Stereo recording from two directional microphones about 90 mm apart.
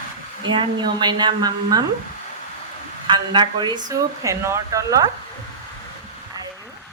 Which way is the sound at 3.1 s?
55° right (ahead or behind).